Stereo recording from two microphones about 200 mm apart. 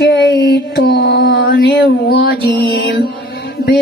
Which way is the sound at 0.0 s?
55° left (ahead or behind).